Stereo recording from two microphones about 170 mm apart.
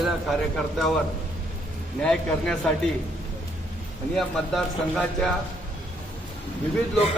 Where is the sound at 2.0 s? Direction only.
5° left (ahead or behind).